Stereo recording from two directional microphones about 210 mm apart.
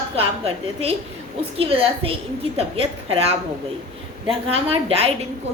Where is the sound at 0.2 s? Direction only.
30° right (ahead or behind).